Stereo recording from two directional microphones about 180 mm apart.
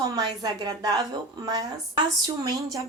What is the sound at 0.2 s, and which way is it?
Speech, 25° right (ahead or behind).